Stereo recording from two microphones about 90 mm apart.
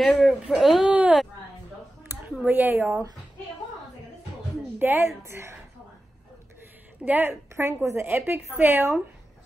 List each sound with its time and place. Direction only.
0.0 s speech: centre (ahead or behind)
0.8 s a sound: 15° right (ahead or behind)
2.1 s a sound: 25° right (ahead or behind)
2.4 s a woman's voice: 20° right (ahead or behind)
4.7 s a woman's voice: 20° right (ahead or behind)
7.1 s a woman's voice: 25° right (ahead or behind)